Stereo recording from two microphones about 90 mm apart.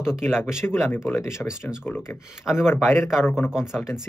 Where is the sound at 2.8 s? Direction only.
25° left (ahead or behind).